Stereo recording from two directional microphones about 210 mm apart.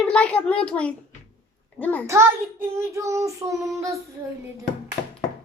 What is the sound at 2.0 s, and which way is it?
Child singing, 15° right (ahead or behind).